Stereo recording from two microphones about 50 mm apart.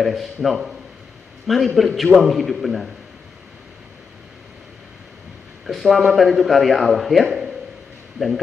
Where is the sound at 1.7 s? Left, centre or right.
Centre.